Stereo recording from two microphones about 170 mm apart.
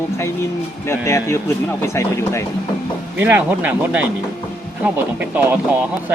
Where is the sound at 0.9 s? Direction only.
15° left (ahead or behind).